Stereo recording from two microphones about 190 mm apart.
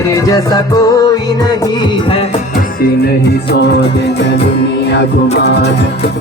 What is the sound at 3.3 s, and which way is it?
Music, 60° left (ahead or behind).